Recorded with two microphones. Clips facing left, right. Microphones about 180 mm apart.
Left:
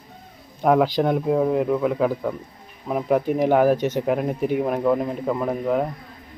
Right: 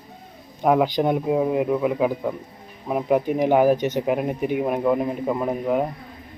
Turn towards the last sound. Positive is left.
turn(degrees=-5)  # may be behind; listen again after turning